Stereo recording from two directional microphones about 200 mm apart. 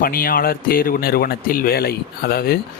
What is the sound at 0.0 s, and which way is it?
Speech, 45° left (ahead or behind).